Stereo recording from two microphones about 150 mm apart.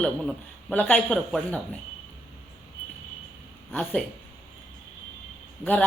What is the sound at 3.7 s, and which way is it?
Speech, 10° left (ahead or behind).